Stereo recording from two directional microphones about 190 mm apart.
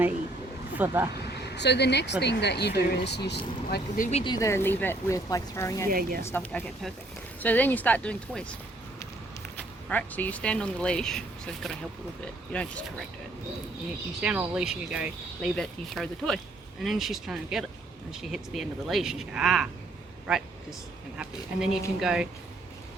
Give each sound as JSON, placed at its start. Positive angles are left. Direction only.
{"t": 0.8, "sound": "speech", "side_deg": -10}
{"t": 1.3, "sound": "speech", "side_deg": 60}
{"t": 3.7, "sound": "speech", "side_deg": 45}
{"t": 4.2, "sound": "speech", "side_deg": 20}
{"t": 5.9, "sound": "speech", "side_deg": -50}
{"t": 6.2, "sound": "speech", "side_deg": 10}
{"t": 9.9, "sound": "speech", "side_deg": 10}
{"t": 14.2, "sound": "speech", "side_deg": -5}
{"t": 21.2, "sound": "speech", "side_deg": -5}